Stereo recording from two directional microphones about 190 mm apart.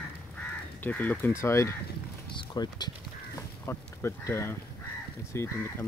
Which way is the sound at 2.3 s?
20° left (ahead or behind).